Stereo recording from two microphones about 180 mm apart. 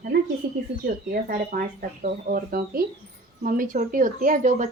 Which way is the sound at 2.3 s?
55° right (ahead or behind).